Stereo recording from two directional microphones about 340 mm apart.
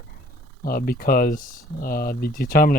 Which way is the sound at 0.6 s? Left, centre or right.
Left.